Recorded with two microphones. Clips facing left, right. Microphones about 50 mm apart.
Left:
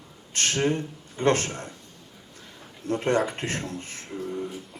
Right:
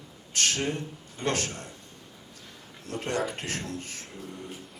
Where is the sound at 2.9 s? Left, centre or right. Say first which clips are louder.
Left 6 dB; left.